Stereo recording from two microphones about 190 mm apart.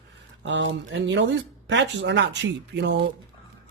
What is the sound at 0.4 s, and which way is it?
Speech, 70° right (ahead or behind).